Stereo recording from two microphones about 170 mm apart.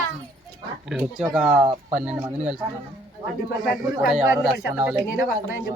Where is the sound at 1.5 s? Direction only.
15° right (ahead or behind).